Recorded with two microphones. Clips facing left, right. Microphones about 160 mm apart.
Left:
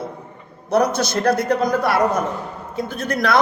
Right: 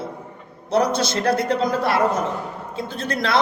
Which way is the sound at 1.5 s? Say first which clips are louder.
Left 2 dB; 25° right (ahead or behind).